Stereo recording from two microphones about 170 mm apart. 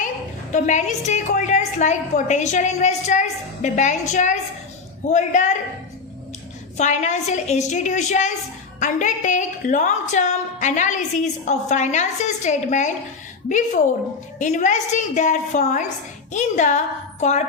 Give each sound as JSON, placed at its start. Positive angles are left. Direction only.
{"t": 0.5, "sound": "a woman's voice", "side_deg": 45}
{"t": 6.7, "sound": "a woman's voice", "side_deg": 45}
{"t": 14.3, "sound": "a woman's voice", "side_deg": 45}